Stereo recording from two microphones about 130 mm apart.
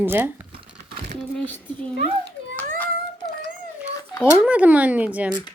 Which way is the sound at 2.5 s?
10° left (ahead or behind).